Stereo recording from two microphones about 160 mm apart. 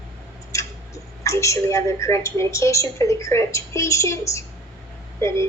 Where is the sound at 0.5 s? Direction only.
20° left (ahead or behind).